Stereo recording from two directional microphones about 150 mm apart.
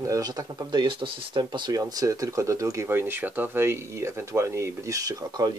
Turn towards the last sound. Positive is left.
turn(degrees=-25)  # may be behind; listen again after turning